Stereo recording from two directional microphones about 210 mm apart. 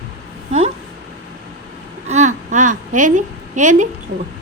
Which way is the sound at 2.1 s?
35° right (ahead or behind).